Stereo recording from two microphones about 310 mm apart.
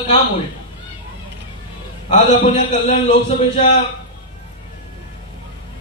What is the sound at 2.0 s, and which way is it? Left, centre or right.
A man's voice, left.